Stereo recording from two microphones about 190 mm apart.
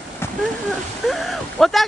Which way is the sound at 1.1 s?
Centre (ahead or behind).